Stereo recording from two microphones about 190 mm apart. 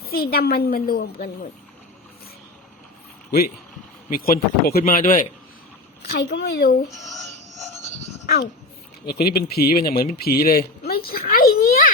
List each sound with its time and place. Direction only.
0.0 s a woman's voice: 55° left (ahead or behind)
4.1 s a woman's voice: 50° left (ahead or behind)
6.1 s speech: 60° left (ahead or behind)
6.9 s speech: centre (ahead or behind)
9.0 s a woman's voice: 55° left (ahead or behind)
10.2 s a sound: 55° left (ahead or behind)